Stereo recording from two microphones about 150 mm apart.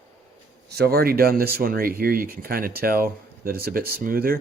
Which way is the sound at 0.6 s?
90° right.